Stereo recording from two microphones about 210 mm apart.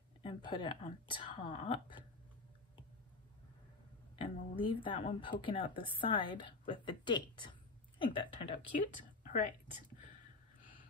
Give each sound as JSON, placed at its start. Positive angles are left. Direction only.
{"t": 0.2, "sound": "speech", "side_deg": 25}
{"t": 4.2, "sound": "speech", "side_deg": 25}
{"t": 9.2, "sound": "a sound", "side_deg": 40}